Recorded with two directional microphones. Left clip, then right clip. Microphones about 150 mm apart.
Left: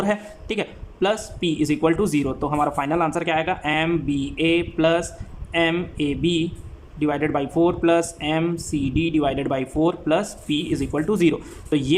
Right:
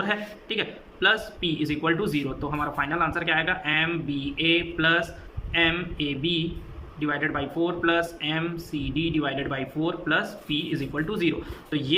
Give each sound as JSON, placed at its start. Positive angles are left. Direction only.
{"t": 0.0, "sound": "a man's voice", "side_deg": 40}